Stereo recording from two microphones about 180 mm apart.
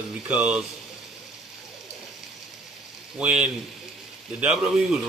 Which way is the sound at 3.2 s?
5° right (ahead or behind).